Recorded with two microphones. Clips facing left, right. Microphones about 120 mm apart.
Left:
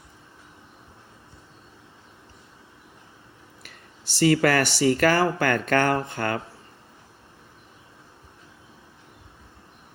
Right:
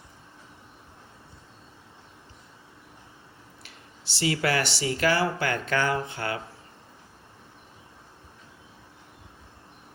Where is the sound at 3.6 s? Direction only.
50° left (ahead or behind).